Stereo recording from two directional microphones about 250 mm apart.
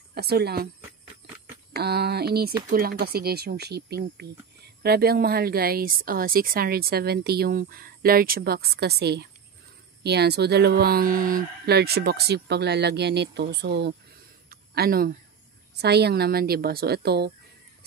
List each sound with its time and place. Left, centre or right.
0.1 s speech: right
1.8 s speech: right
14.5 s a sound: right
15.8 s speech: right